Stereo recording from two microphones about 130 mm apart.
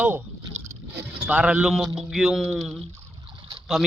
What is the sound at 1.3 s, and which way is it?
A man's voice, 10° right (ahead or behind).